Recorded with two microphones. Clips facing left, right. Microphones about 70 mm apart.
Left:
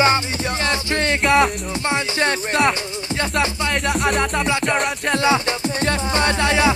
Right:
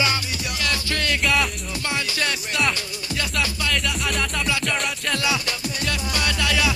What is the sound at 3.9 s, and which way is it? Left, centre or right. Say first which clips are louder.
Music: left 7 dB; left.